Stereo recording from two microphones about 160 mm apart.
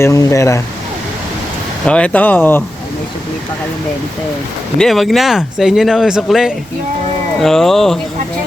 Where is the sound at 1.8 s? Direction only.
5° left (ahead or behind).